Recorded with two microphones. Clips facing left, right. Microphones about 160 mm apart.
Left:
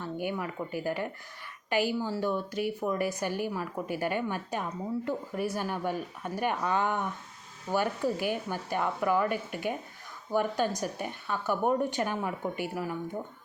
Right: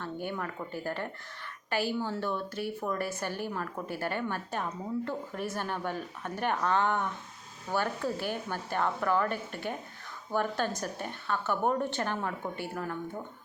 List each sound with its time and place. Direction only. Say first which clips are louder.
0.0 s a woman's voice: left 2 dB; 10° left (ahead or behind)